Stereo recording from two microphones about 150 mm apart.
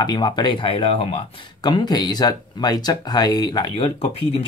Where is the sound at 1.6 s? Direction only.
30° left (ahead or behind).